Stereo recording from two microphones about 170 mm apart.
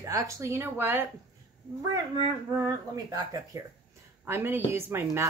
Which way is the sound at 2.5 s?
20° right (ahead or behind).